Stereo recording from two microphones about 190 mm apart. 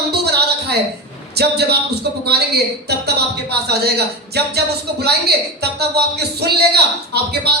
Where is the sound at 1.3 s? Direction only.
60° right (ahead or behind).